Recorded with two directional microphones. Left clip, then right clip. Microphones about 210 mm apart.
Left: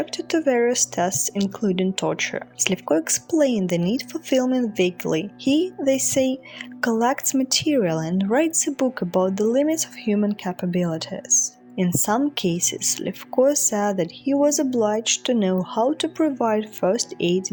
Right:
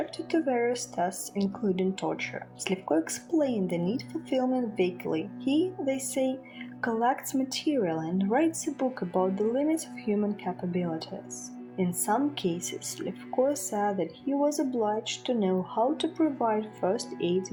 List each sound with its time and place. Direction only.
0.0 s a woman's voice: 50° left (ahead or behind)